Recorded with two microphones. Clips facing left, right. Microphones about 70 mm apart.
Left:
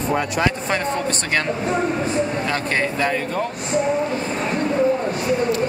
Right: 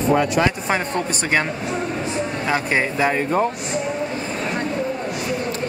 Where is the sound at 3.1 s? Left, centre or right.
Right.